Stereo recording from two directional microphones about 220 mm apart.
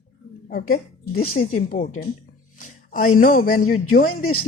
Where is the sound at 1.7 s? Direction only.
35° left (ahead or behind).